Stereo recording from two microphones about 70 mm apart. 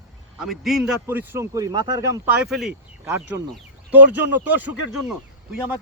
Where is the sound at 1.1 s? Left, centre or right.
Right.